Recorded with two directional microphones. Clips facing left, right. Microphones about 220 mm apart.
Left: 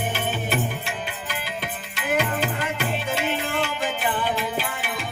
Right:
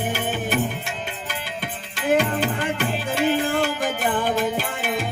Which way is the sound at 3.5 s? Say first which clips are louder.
Right 3 dB; 45° right (ahead or behind).